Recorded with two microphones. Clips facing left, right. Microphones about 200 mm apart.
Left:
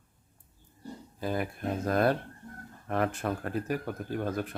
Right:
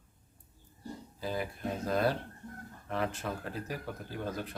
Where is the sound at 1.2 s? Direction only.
55° left (ahead or behind).